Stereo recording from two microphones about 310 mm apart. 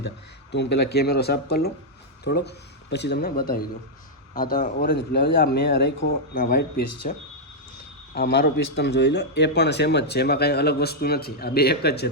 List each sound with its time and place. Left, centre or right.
0.5 s a man's voice: left